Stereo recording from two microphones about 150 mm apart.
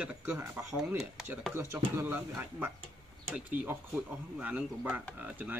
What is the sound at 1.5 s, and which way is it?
Speech, 15° right (ahead or behind).